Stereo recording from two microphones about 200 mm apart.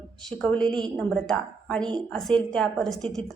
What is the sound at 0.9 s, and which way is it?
A woman's voice, 5° left (ahead or behind).